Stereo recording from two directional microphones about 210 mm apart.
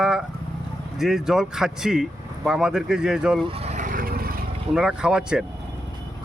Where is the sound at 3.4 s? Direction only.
30° right (ahead or behind); by 4.4 s 45° right (ahead or behind).